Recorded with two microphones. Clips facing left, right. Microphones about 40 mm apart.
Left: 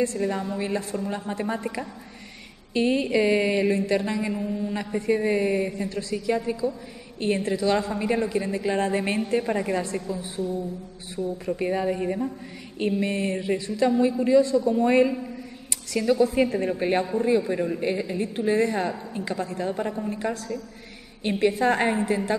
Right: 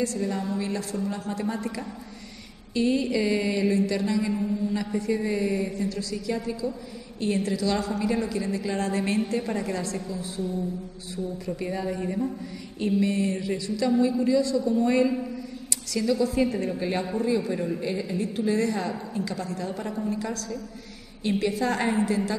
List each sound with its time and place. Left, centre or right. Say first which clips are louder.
0.0 s a woman's voice: left 2 dB; left
4.3 s a man's voice: right 1 dB; centre
4.6 s a woman's voice: left 1 dB; left
11.4 s a woman's voice: left 6 dB; left
13.0 s a woman's voice: even; left